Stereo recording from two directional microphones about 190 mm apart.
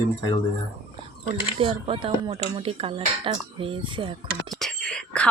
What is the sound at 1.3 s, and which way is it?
Speech, 30° right (ahead or behind).